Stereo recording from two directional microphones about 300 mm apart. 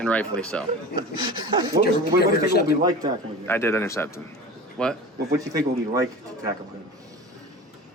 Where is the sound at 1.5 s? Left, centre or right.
Centre.